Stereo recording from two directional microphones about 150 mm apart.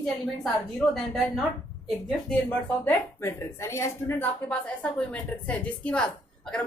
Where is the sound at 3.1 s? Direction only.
15° left (ahead or behind).